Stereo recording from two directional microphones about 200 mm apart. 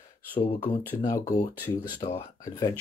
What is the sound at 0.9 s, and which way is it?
Speech, 20° left (ahead or behind).